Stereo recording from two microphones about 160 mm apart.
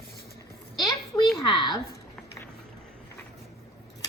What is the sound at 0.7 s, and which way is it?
A woman's voice, 25° left (ahead or behind).